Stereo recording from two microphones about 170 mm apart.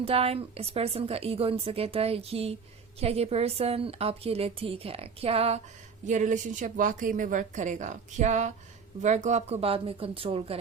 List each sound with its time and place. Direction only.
0.0 s a woman's voice: 35° right (ahead or behind)
6.1 s a woman's voice: 45° right (ahead or behind)